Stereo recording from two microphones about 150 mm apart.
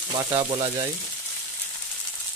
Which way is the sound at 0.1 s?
30° right (ahead or behind).